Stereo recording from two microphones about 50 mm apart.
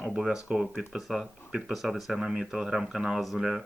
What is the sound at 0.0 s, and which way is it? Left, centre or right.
Speech, centre.